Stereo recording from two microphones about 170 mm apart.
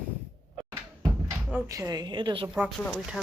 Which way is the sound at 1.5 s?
15° right (ahead or behind).